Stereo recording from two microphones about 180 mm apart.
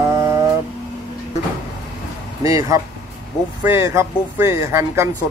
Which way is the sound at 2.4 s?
20° right (ahead or behind).